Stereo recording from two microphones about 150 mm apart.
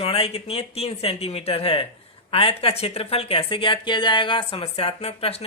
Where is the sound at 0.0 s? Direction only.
40° left (ahead or behind).